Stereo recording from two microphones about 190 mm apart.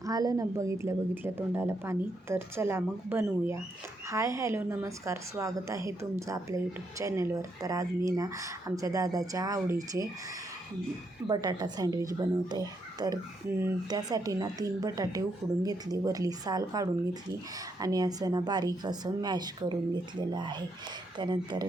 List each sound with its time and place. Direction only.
0.0 s a woman's voice: 20° right (ahead or behind)
11.3 s speech: 20° right (ahead or behind)